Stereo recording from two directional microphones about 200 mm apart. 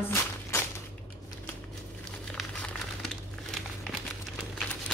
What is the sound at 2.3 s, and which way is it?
Crumpling, centre (ahead or behind).